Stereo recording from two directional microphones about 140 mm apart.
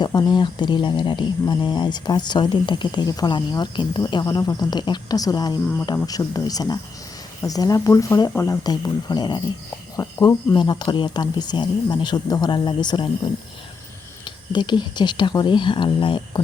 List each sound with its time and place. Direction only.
0.0 s speech: 30° left (ahead or behind)
14.3 s speech: 35° left (ahead or behind)